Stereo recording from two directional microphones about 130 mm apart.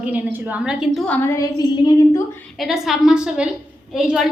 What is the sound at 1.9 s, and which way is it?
Speech, 25° left (ahead or behind).